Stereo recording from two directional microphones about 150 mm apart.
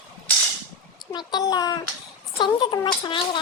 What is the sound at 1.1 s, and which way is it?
A child's voice, 30° left (ahead or behind).